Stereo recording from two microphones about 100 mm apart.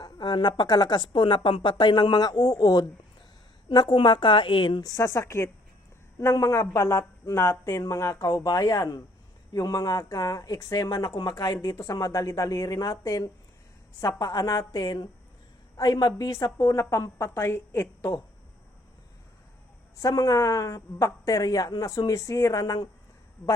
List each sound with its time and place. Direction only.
0.0 s a woman's voice: 50° left (ahead or behind)
4.8 s speech: 35° left (ahead or behind)
20.0 s speech: 35° left (ahead or behind)